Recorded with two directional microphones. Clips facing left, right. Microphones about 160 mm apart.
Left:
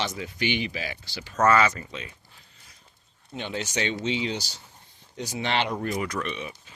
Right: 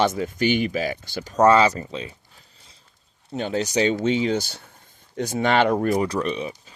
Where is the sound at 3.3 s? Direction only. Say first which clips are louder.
Right 8 dB; 40° right (ahead or behind).